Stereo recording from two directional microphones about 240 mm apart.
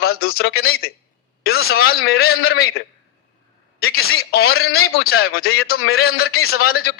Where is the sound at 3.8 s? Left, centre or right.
Left.